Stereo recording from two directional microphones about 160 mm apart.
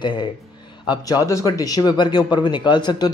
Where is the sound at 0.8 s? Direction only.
25° left (ahead or behind).